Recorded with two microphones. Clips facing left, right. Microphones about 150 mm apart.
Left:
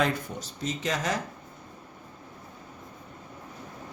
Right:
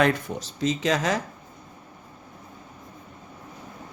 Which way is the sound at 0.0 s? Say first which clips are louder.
Right 5 dB; 85° right.